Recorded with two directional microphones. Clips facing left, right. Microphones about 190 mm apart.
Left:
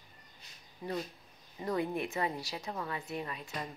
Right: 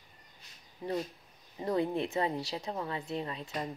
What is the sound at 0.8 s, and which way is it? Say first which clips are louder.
A woman's voice: right 3 dB; 25° right (ahead or behind).